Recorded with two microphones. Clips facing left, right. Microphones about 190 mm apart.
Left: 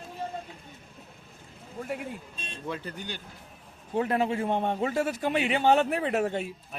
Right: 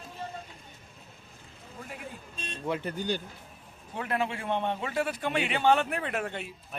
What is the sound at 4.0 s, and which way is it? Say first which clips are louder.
A man's voice: left 5 dB; 35° left (ahead or behind).